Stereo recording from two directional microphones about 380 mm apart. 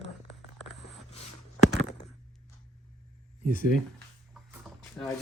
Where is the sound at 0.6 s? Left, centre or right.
Centre.